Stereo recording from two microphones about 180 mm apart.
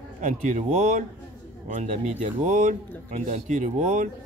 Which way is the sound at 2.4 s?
45° right (ahead or behind).